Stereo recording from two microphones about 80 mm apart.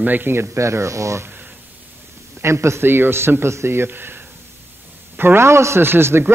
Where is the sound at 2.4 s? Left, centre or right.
Right.